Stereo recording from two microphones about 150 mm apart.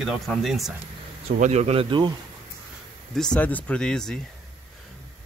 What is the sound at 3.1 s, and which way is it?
Speech, 5° left (ahead or behind).